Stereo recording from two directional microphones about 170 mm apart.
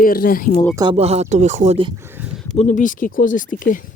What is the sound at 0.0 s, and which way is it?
Speech, 60° left (ahead or behind).